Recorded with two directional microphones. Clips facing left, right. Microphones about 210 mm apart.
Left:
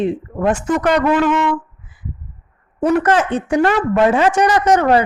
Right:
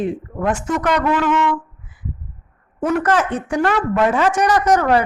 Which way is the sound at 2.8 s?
30° left (ahead or behind).